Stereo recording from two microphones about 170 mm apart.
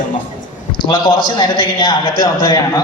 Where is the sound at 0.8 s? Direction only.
25° left (ahead or behind).